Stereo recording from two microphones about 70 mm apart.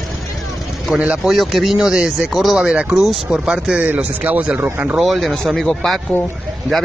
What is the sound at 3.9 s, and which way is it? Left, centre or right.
Speech, right.